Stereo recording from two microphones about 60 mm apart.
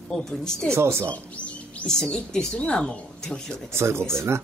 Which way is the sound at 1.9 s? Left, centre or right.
Centre.